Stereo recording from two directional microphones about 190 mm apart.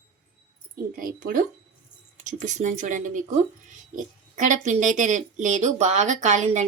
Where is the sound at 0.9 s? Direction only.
45° right (ahead or behind).